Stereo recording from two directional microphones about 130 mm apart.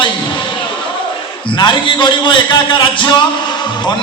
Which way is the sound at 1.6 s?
35° left (ahead or behind).